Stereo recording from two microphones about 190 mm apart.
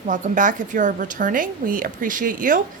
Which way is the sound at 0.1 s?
45° right (ahead or behind).